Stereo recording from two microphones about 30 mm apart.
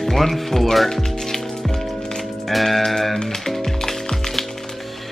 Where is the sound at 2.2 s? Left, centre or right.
Centre.